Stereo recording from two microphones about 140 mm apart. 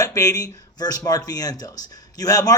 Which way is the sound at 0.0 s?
25° left (ahead or behind).